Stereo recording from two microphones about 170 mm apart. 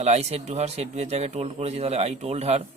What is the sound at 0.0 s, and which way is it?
Speech, 40° right (ahead or behind).